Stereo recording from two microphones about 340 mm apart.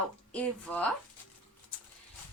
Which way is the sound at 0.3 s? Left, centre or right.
Centre.